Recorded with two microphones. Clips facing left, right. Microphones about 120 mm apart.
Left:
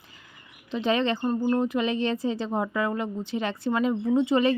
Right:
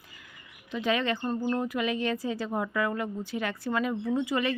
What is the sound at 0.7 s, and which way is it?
Speech, 25° left (ahead or behind).